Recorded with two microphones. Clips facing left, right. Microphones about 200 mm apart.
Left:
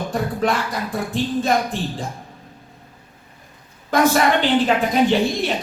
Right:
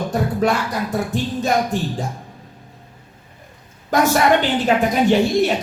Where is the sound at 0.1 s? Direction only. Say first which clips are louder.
Right 2 dB; 40° right (ahead or behind).